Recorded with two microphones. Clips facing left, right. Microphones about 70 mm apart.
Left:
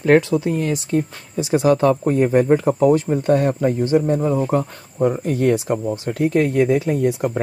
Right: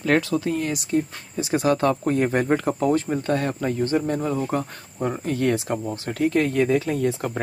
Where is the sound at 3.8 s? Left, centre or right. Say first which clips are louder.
Left 5 dB; centre.